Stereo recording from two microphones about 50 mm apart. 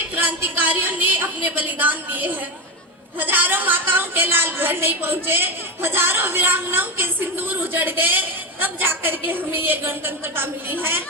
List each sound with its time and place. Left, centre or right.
0.2 s a woman's voice: right